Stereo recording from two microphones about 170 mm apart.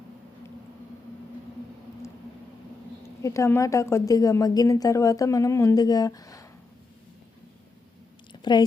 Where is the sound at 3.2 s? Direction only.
15° left (ahead or behind).